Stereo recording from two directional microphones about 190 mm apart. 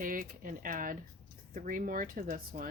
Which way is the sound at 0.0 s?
45° right (ahead or behind).